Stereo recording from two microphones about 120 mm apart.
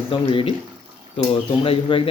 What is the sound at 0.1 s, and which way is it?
Speech, 50° left (ahead or behind).